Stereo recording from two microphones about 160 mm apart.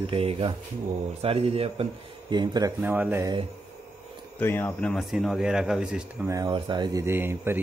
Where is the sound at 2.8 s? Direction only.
10° right (ahead or behind).